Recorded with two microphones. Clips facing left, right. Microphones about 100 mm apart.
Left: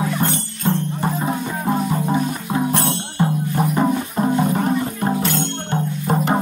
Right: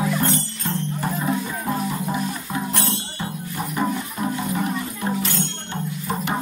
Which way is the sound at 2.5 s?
50° left (ahead or behind).